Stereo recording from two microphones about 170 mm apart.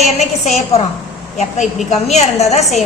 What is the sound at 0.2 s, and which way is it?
Speech, 40° left (ahead or behind).